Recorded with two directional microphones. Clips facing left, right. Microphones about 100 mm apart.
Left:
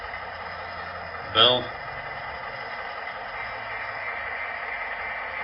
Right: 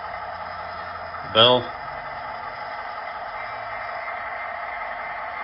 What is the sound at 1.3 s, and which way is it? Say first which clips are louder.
Speech: right 5 dB; 45° right (ahead or behind).